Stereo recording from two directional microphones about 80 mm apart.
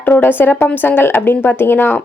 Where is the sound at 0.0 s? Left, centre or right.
Left.